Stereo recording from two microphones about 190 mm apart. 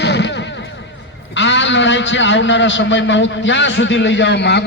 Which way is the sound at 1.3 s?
75° left (ahead or behind).